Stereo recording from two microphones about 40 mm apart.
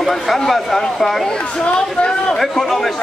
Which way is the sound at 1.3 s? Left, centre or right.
Left.